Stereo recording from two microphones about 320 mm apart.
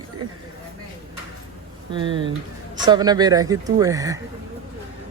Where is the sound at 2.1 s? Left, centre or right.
Centre.